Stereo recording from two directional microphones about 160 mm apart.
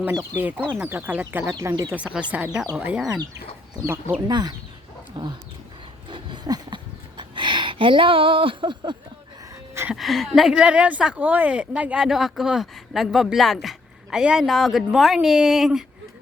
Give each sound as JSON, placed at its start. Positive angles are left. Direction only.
{"t": 0.0, "sound": "speech", "side_deg": -15}
{"t": 2.3, "sound": "speech", "side_deg": -10}
{"t": 4.3, "sound": "speech", "side_deg": -25}
{"t": 6.1, "sound": "a sound", "side_deg": -30}
{"t": 7.2, "sound": "speech", "side_deg": -30}
{"t": 9.7, "sound": "a sound", "side_deg": -10}
{"t": 10.0, "sound": "speech", "side_deg": 0}